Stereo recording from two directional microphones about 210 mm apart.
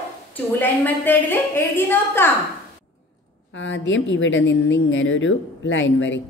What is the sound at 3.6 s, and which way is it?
A woman's voice, 60° left (ahead or behind).